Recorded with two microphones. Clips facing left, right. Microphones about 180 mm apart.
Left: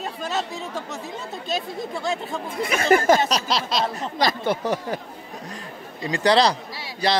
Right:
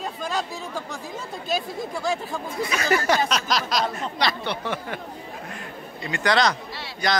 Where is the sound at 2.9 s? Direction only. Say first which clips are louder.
Left 3 dB; 45° left (ahead or behind); by 4.1 s 30° left (ahead or behind).